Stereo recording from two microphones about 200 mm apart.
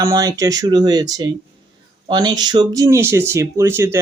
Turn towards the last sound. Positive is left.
turn(degrees=-15)  # may be behind; listen again after turning